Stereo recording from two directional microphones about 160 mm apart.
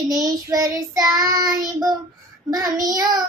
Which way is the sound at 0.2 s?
25° right (ahead or behind).